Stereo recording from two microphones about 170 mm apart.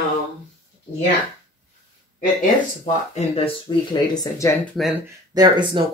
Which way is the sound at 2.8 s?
40° left (ahead or behind).